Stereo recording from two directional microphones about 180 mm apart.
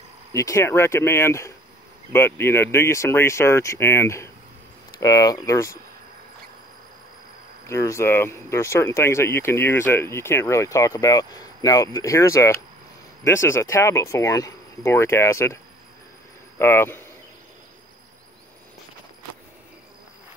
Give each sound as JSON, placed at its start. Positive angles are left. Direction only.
{"t": 0.3, "sound": "speech", "side_deg": 15}
{"t": 7.6, "sound": "speech", "side_deg": 15}